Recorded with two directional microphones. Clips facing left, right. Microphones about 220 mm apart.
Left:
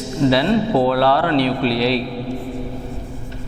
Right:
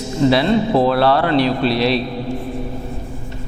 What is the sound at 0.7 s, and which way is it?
A man's voice, 30° right (ahead or behind).